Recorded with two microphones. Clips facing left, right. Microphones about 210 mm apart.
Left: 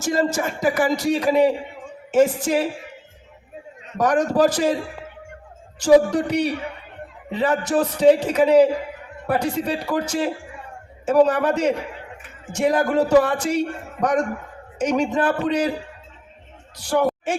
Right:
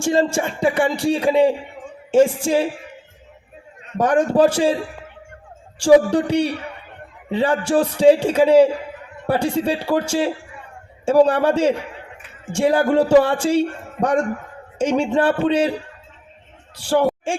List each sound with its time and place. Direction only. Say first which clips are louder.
0.0 s speech: right 3 dB; 30° right (ahead or behind)
3.9 s speech: right 2 dB; 30° right (ahead or behind)
5.8 s speech: right 2 dB; 30° right (ahead or behind)
16.8 s speech: right 2 dB; 30° right (ahead or behind)